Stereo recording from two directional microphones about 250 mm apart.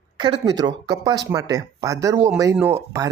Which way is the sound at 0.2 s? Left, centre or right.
Centre.